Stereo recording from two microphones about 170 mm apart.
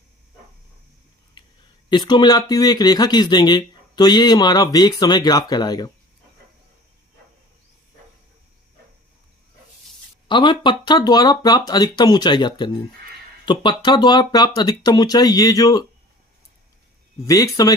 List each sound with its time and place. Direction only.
1.4 s a sound: 25° left (ahead or behind)
1.9 s speech: 25° left (ahead or behind)
10.2 s speech: 30° left (ahead or behind)
17.2 s speech: 20° left (ahead or behind)